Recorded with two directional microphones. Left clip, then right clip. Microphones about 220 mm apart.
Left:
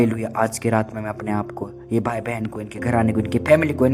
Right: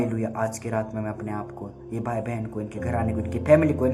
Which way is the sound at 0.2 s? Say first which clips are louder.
Left 6 dB; 45° left (ahead or behind).